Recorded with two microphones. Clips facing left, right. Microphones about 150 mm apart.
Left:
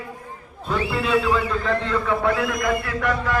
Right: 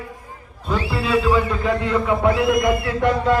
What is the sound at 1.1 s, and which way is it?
Speech, 5° right (ahead or behind).